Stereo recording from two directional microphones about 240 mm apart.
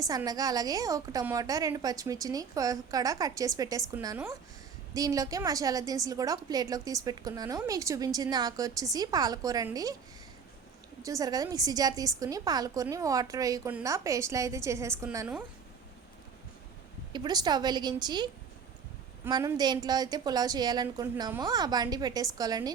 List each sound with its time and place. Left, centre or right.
0.0 s a woman's voice: centre
11.0 s a woman's voice: centre
17.1 s a woman's voice: centre